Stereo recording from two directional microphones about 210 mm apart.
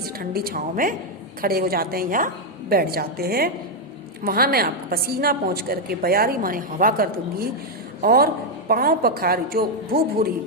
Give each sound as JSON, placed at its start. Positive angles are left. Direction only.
{"t": 0.0, "sound": "a woman's voice", "side_deg": -45}